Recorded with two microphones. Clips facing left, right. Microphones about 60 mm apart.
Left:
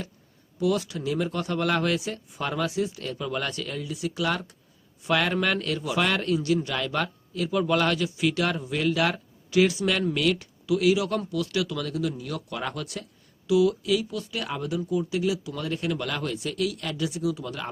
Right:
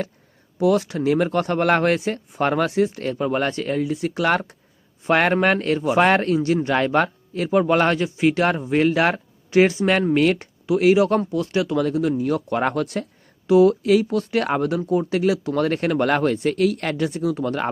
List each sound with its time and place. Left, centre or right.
0.6 s a man's voice: right